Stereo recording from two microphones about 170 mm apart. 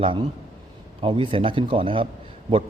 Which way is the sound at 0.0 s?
30° right (ahead or behind).